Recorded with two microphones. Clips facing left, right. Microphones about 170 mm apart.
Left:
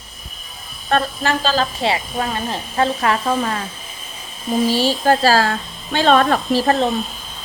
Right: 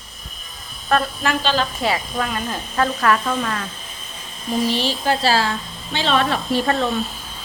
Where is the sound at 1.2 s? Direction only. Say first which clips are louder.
Left 2 dB; 35° left (ahead or behind).